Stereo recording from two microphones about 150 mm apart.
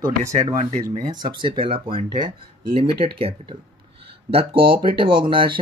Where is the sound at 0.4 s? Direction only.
45° right (ahead or behind).